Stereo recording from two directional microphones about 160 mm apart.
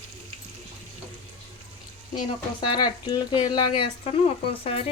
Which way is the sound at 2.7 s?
25° left (ahead or behind).